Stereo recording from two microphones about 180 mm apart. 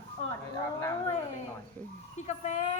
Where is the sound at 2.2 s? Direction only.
40° left (ahead or behind).